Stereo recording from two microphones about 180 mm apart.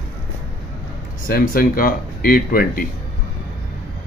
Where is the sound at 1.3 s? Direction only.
55° left (ahead or behind).